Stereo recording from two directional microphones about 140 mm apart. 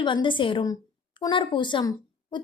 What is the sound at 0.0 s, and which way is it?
A woman's voice, 35° left (ahead or behind).